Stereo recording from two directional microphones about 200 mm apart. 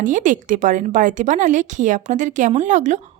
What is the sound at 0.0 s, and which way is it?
A woman's voice, 40° right (ahead or behind).